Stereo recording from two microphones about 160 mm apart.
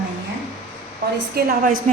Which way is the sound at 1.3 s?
70° right (ahead or behind).